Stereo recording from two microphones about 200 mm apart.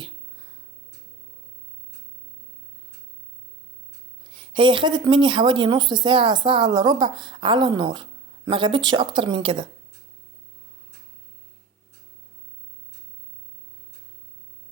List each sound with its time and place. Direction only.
4.3 s speech: 25° right (ahead or behind)